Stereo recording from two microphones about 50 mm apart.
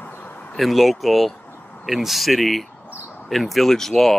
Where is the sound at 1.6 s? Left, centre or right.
Left.